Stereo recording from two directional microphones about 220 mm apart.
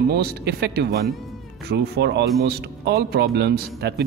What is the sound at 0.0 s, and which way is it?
A man's voice, 45° right (ahead or behind).